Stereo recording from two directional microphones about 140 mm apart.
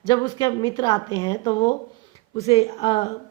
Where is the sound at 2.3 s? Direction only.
45° left (ahead or behind).